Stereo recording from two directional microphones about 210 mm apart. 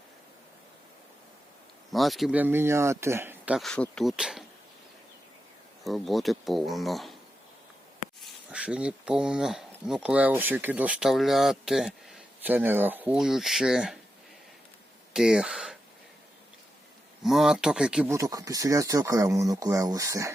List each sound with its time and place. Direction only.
1.9 s speech: centre (ahead or behind)
5.8 s speech: centre (ahead or behind)
8.2 s speech: 5° right (ahead or behind)
15.1 s speech: 5° right (ahead or behind)
17.2 s speech: centre (ahead or behind)